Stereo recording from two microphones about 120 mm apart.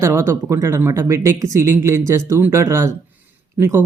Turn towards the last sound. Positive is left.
turn(degrees=-20)  # may be behind; listen again after turning